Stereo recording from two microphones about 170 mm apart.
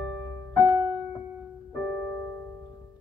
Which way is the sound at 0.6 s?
15° right (ahead or behind).